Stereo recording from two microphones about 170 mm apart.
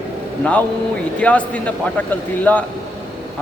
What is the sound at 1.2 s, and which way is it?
Speech, 10° left (ahead or behind).